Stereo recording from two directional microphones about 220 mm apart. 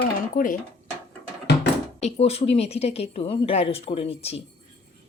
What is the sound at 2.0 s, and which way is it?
Speech, 30° left (ahead or behind).